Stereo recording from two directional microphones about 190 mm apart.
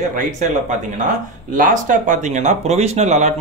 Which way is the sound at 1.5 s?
45° right (ahead or behind).